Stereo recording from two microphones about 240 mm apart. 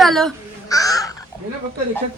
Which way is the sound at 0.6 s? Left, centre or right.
Centre.